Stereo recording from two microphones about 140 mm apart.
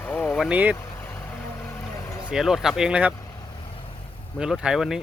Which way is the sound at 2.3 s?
Centre (ahead or behind).